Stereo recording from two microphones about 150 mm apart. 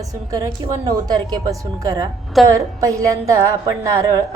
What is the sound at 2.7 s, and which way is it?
Speech, 20° right (ahead or behind).